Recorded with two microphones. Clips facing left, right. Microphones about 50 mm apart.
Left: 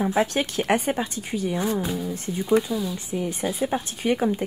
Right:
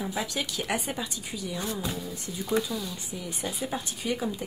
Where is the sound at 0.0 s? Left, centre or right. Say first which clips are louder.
Left 9 dB; left.